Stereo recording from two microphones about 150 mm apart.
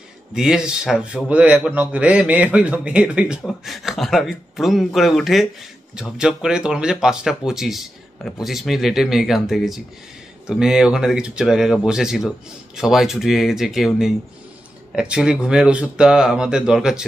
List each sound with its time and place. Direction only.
0.3 s a man's voice: 5° right (ahead or behind)